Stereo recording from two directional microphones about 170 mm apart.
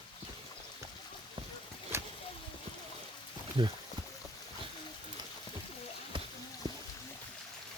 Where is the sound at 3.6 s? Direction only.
25° right (ahead or behind).